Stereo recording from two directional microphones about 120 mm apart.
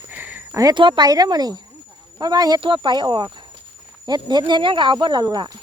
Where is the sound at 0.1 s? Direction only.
15° right (ahead or behind).